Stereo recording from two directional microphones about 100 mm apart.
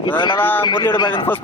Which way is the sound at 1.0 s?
50° left (ahead or behind).